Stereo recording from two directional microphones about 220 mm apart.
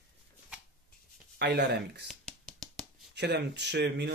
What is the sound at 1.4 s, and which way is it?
Speech, 50° right (ahead or behind).